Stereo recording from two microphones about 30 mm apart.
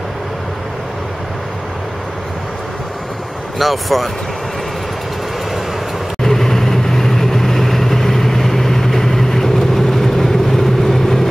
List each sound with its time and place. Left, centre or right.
3.5 s speech: centre
6.2 s vehicle: centre